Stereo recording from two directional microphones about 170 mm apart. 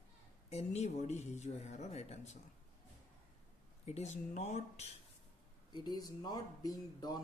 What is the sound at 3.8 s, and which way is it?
Speech, 40° left (ahead or behind).